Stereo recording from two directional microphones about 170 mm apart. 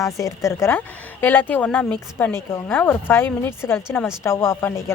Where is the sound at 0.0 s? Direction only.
20° left (ahead or behind).